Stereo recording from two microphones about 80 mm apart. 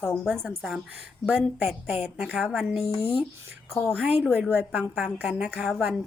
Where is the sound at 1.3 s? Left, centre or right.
Right.